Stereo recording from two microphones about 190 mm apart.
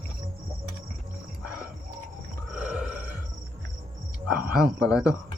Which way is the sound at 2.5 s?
5° right (ahead or behind).